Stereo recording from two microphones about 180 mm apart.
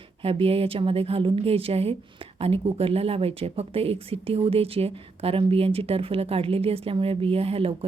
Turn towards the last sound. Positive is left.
turn(degrees=-30)  # may be behind; listen again after turning